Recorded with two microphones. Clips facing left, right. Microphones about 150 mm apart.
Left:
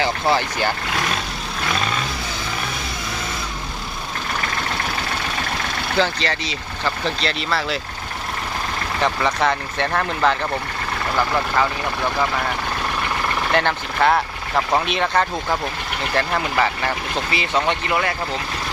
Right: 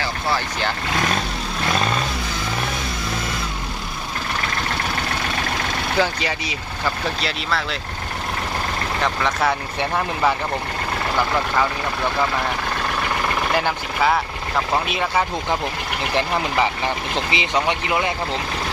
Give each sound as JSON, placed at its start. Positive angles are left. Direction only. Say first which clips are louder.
{"t": 6.0, "sound": "speech", "louder": "left 1 dB", "side_deg": -10}
{"t": 9.0, "sound": "speech", "louder": "left 2 dB", "side_deg": 0}
{"t": 9.5, "sound": "speech", "louder": "left 1 dB", "side_deg": -10}
{"t": 13.5, "sound": "speech", "louder": "left 1 dB", "side_deg": -5}